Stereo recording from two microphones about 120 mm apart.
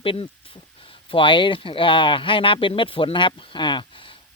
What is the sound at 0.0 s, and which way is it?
Speech, 50° left (ahead or behind).